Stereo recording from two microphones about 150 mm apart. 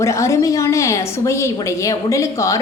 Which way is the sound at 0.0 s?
20° left (ahead or behind).